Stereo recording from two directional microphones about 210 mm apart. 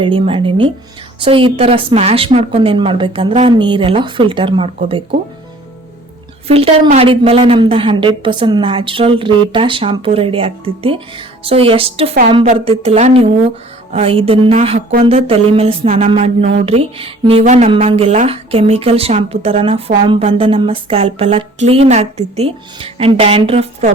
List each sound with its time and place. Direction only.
0.0 s a woman's voice: 25° right (ahead or behind)
6.5 s a woman's voice: 30° right (ahead or behind)